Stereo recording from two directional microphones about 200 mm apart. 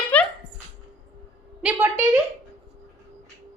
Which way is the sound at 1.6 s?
10° right (ahead or behind).